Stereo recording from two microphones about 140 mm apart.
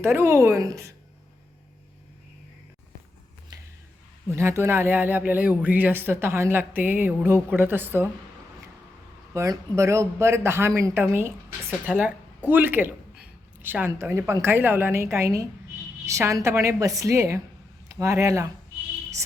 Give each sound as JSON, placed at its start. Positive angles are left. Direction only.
{"t": 0.0, "sound": "speech", "side_deg": -20}
{"t": 4.3, "sound": "speech", "side_deg": -20}
{"t": 9.3, "sound": "speech", "side_deg": -20}